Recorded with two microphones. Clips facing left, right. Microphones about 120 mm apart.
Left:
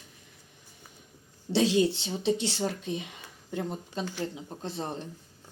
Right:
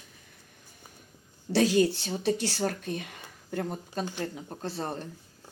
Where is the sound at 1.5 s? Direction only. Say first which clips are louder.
Right 1 dB; 25° left (ahead or behind).